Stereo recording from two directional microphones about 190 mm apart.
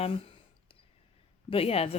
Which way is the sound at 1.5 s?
30° left (ahead or behind).